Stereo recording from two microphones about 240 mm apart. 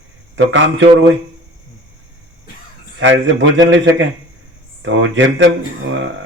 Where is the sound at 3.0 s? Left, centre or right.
Right.